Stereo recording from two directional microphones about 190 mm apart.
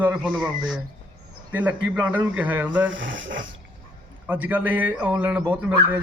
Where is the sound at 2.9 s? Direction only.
80° right.